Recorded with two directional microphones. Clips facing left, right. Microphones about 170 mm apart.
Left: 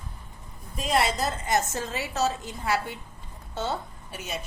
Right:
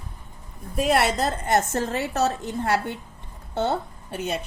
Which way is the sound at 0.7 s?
65° right (ahead or behind).